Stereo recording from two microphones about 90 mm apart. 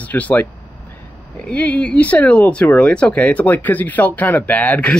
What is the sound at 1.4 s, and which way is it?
Speech, 15° left (ahead or behind).